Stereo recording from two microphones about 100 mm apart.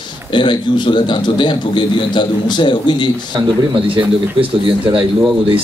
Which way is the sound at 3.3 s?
60° right (ahead or behind).